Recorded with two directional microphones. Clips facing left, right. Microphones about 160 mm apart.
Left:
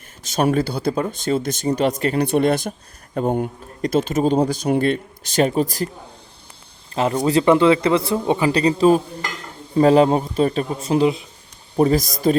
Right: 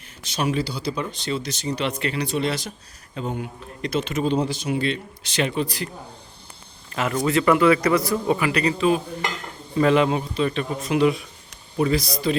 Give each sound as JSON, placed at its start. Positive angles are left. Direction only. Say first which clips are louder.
{"t": 0.2, "sound": "a man's voice", "louder": "left 6 dB", "side_deg": 45}
{"t": 2.2, "sound": "a man's voice", "louder": "left 9 dB", "side_deg": 55}
{"t": 6.9, "sound": "speech", "louder": "left 4 dB", "side_deg": 30}
{"t": 11.8, "sound": "a man's voice", "louder": "left 5 dB", "side_deg": 45}